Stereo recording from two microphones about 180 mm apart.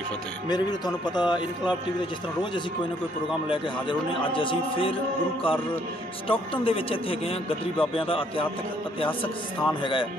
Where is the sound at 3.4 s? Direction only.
30° left (ahead or behind).